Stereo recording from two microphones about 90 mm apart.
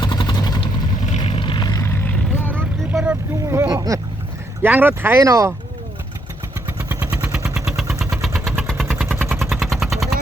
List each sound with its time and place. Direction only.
0.0 s vehicle: 60° left (ahead or behind)
1.2 s vehicle: 70° left (ahead or behind); by 1.8 s 55° left (ahead or behind)
1.8 s vehicle: 25° left (ahead or behind)
2.9 s vehicle: 10° right (ahead or behind)
3.7 s vehicle: 40° right (ahead or behind)
4.6 s speech: 20° right (ahead or behind)
5.2 s speech: 40° right (ahead or behind)
6.7 s vehicle: 25° right (ahead or behind)
7.6 s vehicle: 10° right (ahead or behind)
9.1 s machine gun: 25° right (ahead or behind)
9.4 s vehicle: centre (ahead or behind)